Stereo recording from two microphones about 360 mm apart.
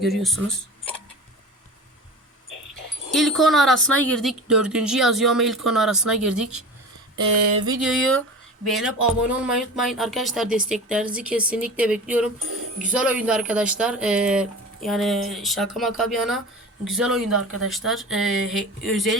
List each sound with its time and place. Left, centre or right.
0.0 s speech: centre
3.1 s speech: centre
7.2 s a sound: right
7.6 s speech: centre
12.4 s speech: right
12.9 s speech: centre